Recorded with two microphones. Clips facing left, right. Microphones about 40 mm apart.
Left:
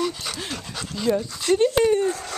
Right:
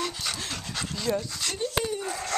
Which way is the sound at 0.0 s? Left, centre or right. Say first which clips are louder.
Left 5 dB; centre.